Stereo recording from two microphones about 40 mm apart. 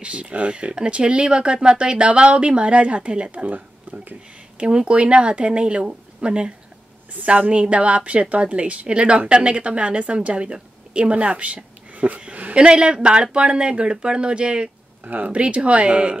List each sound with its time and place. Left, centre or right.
0.0 s speech: right
4.6 s a woman's voice: right
12.5 s speech: right
15.0 s a woman's voice: right